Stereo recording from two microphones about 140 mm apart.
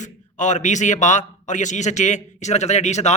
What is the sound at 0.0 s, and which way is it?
A man's voice, 60° left (ahead or behind).